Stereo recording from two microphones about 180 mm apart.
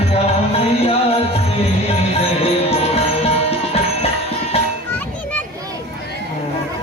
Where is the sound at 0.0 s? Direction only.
35° left (ahead or behind).